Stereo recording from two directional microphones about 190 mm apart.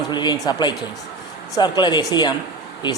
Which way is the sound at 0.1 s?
20° left (ahead or behind).